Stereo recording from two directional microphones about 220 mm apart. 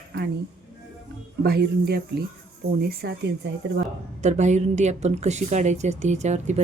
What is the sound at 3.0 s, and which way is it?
Speech, 50° right (ahead or behind).